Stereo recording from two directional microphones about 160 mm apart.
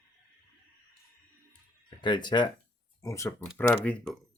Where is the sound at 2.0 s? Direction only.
30° left (ahead or behind).